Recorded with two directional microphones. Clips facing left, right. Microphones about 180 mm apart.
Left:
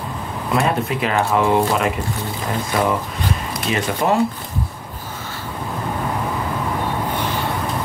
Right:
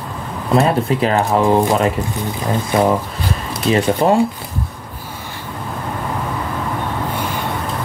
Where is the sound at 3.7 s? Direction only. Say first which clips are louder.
Right 5 dB; 30° right (ahead or behind).